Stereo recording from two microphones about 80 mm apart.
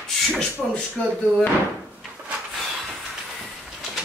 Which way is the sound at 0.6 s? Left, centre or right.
Centre.